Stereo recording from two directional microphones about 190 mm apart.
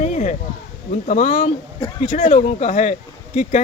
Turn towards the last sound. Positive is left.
turn(degrees=40)  # may be behind; listen again after turning